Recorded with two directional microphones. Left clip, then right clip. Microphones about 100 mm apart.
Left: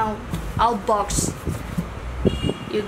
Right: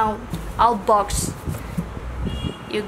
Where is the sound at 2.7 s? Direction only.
50° right (ahead or behind).